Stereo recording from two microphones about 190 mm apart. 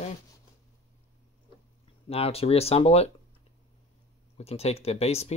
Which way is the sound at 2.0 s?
30° left (ahead or behind).